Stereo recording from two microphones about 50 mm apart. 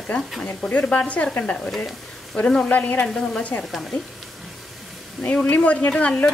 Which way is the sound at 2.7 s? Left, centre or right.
Left.